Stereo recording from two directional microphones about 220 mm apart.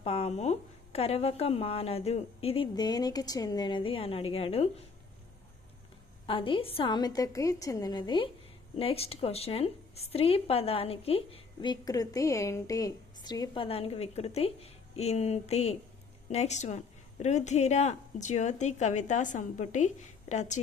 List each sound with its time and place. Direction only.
0.0 s a woman's voice: 25° left (ahead or behind)
6.2 s a woman's voice: 25° left (ahead or behind)